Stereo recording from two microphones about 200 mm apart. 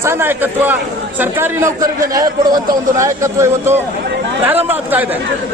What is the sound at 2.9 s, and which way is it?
Speech, 15° right (ahead or behind).